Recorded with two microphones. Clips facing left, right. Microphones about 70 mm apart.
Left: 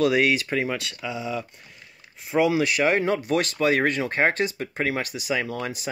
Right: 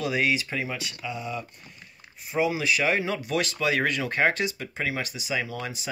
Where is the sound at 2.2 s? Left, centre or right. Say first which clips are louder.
Left 4 dB; left.